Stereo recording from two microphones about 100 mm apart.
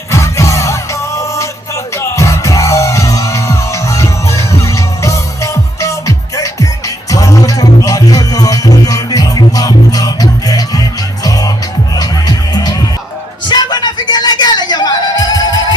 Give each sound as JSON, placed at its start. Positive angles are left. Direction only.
{"t": 0.1, "sound": "music", "side_deg": 30}